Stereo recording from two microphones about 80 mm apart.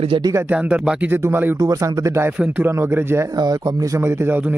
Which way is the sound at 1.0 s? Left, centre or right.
Right.